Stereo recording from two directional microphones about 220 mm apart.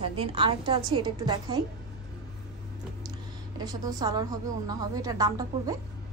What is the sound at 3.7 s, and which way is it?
A woman's voice, 15° right (ahead or behind).